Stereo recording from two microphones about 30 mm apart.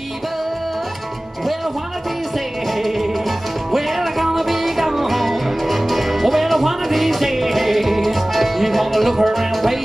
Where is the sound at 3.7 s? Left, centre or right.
Centre.